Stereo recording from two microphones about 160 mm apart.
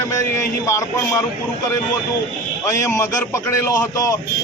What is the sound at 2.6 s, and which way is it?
A man's voice, 20° left (ahead or behind).